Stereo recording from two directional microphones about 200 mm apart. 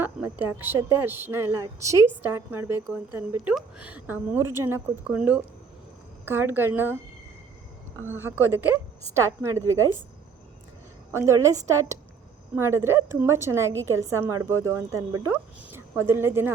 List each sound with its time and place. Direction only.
0.0 s a woman's voice: 10° right (ahead or behind)
8.0 s a woman's voice: 10° right (ahead or behind)
11.1 s a woman's voice: 15° right (ahead or behind)